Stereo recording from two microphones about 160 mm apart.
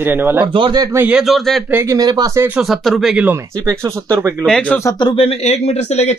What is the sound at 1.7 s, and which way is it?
Speech, 20° right (ahead or behind).